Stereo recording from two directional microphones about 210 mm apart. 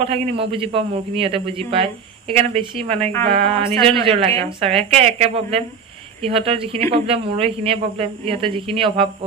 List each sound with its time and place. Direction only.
0.0 s a man's voice: 25° right (ahead or behind)